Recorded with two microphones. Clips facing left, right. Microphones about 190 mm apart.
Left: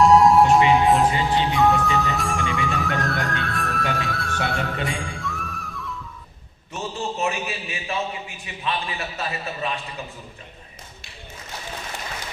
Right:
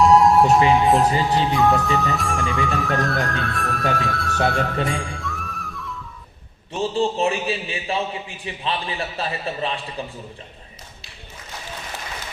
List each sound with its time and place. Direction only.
0.0 s music: centre (ahead or behind)
1.2 s speech: centre (ahead or behind)
6.7 s a man's voice: 30° right (ahead or behind)